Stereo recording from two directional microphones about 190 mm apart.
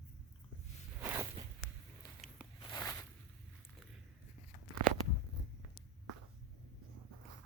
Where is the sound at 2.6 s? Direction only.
20° left (ahead or behind).